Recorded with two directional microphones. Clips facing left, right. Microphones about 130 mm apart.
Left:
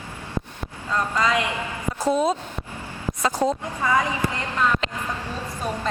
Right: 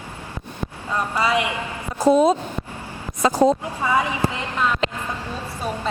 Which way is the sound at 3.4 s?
25° right (ahead or behind).